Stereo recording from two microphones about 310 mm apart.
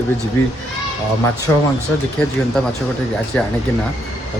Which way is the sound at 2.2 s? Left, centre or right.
Centre.